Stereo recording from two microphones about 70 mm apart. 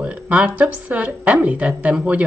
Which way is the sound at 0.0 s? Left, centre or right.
Centre.